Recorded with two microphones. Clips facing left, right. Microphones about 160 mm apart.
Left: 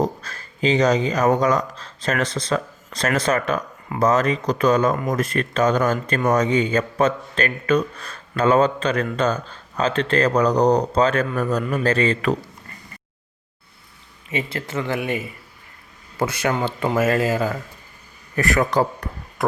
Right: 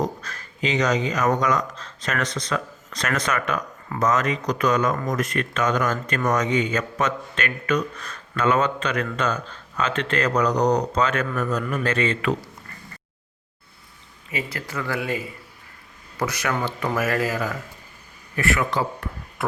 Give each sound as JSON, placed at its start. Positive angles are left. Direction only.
{"t": 0.0, "sound": "speech", "side_deg": 30}
{"t": 14.3, "sound": "speech", "side_deg": 25}
{"t": 18.3, "sound": "speech", "side_deg": 40}